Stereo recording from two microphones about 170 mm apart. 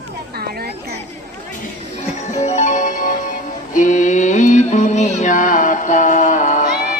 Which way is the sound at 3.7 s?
50° left (ahead or behind).